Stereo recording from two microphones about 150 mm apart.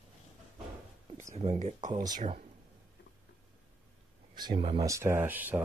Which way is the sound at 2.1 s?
65° right (ahead or behind).